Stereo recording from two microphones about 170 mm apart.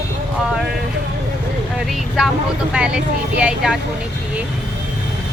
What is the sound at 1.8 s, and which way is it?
A woman's voice, centre (ahead or behind).